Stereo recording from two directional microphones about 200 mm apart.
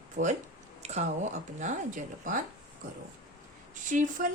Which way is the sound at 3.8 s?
40° right (ahead or behind).